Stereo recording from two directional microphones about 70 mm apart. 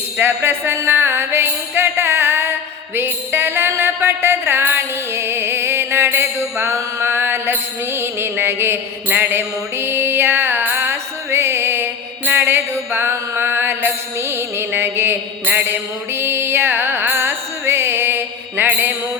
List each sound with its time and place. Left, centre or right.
0.2 s music: right